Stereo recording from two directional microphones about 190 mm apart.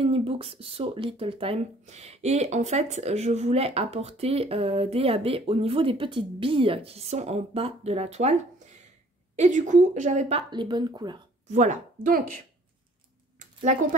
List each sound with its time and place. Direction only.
0.0 s speech: 30° right (ahead or behind)
9.4 s speech: 40° right (ahead or behind)
10.5 s speech: 25° right (ahead or behind)
11.4 s speech: 40° right (ahead or behind)